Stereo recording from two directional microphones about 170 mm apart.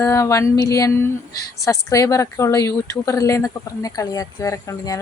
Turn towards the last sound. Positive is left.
turn(degrees=20)  # may be behind; listen again after turning